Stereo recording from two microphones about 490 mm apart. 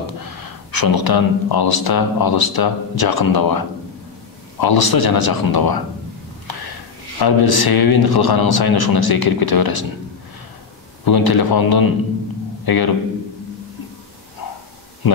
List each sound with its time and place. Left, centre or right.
0.2 s speech: left
7.2 s speech: left
11.1 s speech: left
15.0 s speech: left